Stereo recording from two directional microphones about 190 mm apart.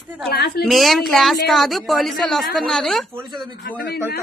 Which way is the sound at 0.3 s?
55° left (ahead or behind).